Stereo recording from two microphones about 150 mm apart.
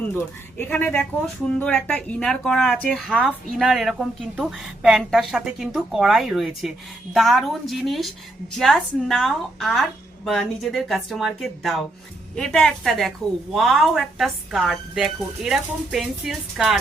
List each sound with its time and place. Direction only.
0.1 s speech: 15° left (ahead or behind); by 16.7 s centre (ahead or behind)